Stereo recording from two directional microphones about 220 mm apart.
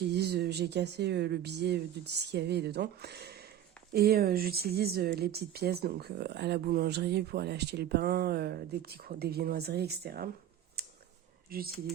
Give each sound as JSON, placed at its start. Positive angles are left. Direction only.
{"t": 0.1, "sound": "speech", "side_deg": -50}
{"t": 10.8, "sound": "a sound", "side_deg": -45}
{"t": 11.5, "sound": "speech", "side_deg": -45}